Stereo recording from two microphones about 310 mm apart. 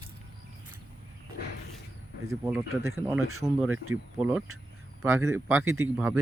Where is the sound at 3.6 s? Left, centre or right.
Right.